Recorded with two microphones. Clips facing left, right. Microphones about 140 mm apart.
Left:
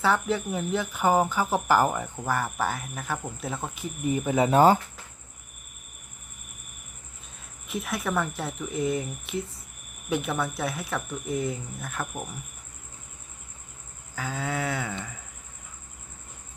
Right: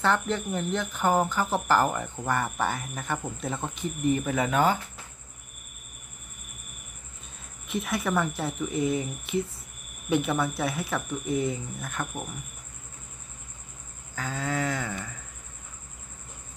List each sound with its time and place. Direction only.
0.0 s speech: 5° left (ahead or behind)
4.4 s speech: 30° left (ahead or behind)
7.7 s speech: centre (ahead or behind)
14.2 s speech: 5° left (ahead or behind)